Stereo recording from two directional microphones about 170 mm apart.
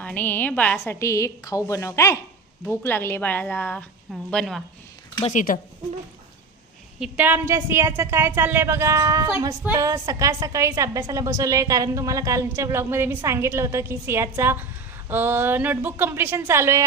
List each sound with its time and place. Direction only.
0.0 s a woman's voice: 10° left (ahead or behind)
5.2 s speech: 50° left (ahead or behind)
7.0 s a woman's voice: 10° right (ahead or behind)